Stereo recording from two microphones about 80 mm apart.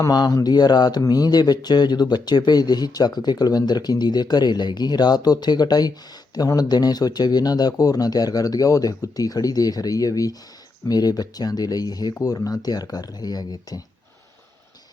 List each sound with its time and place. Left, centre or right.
0.0 s speech: left